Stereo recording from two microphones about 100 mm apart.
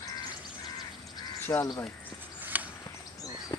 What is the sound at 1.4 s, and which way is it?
Crow, 25° left (ahead or behind).